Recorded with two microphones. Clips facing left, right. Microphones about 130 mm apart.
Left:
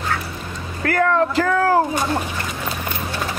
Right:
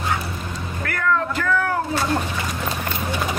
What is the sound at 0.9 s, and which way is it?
Music, 45° left (ahead or behind).